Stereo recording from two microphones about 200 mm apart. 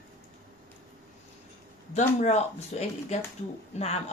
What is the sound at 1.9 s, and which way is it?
Speech, 35° left (ahead or behind).